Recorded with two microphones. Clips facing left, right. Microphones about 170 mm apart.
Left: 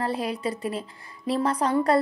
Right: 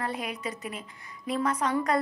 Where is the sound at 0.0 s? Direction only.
30° left (ahead or behind).